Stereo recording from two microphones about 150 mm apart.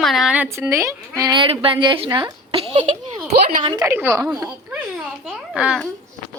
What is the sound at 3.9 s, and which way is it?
A child's voice, 10° right (ahead or behind).